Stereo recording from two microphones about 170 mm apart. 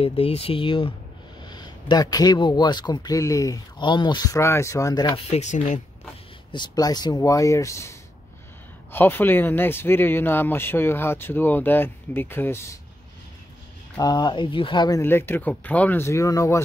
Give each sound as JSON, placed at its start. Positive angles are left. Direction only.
{"t": 0.0, "sound": "speech", "side_deg": 35}
{"t": 5.3, "sound": "speech", "side_deg": 45}
{"t": 6.5, "sound": "speech", "side_deg": 25}
{"t": 8.9, "sound": "speech", "side_deg": 10}
{"t": 13.9, "sound": "speech", "side_deg": 25}
{"t": 15.0, "sound": "speech", "side_deg": 15}